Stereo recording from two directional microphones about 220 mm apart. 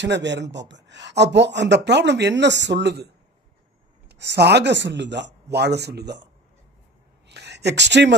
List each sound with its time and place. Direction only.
0.0 s speech: 55° right (ahead or behind)
4.1 s speech: 50° right (ahead or behind)
7.2 s speech: 50° right (ahead or behind)